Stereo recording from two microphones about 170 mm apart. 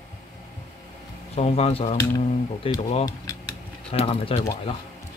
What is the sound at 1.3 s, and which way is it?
Speech, 35° left (ahead or behind).